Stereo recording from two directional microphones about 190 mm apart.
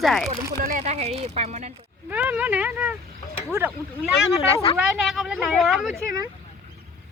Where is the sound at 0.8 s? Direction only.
35° right (ahead or behind).